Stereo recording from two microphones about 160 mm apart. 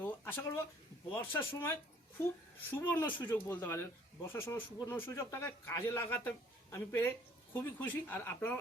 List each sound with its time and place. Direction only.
0.0 s a sound: 15° left (ahead or behind)
1.1 s a man's voice: 15° left (ahead or behind)
2.7 s a man's voice: 10° left (ahead or behind)